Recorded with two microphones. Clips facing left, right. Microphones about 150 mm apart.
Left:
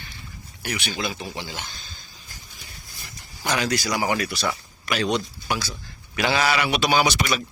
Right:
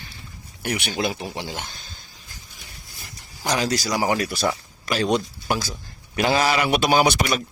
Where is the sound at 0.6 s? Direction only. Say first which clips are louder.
Right 4 dB; 55° right (ahead or behind).